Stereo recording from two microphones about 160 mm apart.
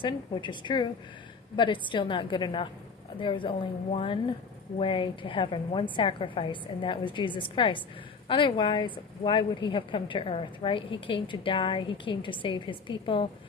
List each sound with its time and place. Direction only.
0.0 s a woman's voice: 30° left (ahead or behind)